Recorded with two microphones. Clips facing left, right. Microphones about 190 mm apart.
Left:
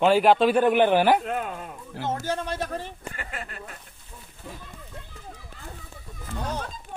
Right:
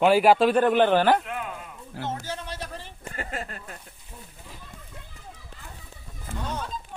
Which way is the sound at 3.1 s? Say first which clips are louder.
Right 3 dB; 40° right (ahead or behind).